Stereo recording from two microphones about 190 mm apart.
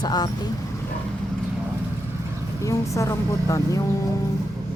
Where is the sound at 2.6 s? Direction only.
15° left (ahead or behind).